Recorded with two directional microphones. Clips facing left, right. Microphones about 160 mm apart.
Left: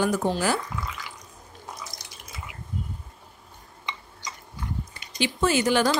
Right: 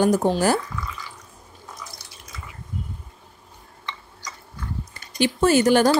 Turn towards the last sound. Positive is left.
turn(degrees=-45)  # may be behind; listen again after turning